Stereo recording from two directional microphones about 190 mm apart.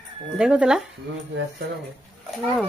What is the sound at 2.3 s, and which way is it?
Speech, centre (ahead or behind).